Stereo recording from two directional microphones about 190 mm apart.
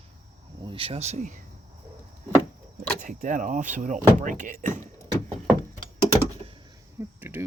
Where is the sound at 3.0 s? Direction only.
45° right (ahead or behind).